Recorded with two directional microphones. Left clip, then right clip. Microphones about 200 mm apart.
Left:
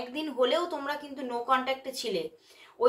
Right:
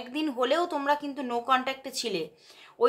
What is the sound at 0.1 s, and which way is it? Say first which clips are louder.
Speech: right 1 dB; 35° right (ahead or behind).